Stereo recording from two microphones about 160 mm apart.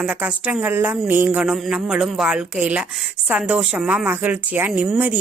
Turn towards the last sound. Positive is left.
turn(degrees=-10)  # may be behind; listen again after turning